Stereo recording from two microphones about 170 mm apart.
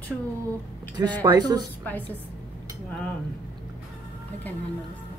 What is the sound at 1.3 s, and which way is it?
Speech, 25° right (ahead or behind).